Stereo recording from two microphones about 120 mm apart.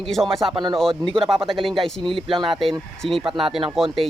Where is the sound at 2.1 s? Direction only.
45° right (ahead or behind).